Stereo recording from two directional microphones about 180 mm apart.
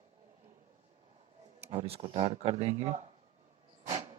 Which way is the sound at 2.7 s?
15° right (ahead or behind).